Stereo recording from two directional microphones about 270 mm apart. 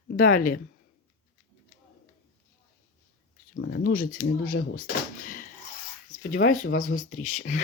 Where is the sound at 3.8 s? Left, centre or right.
Left.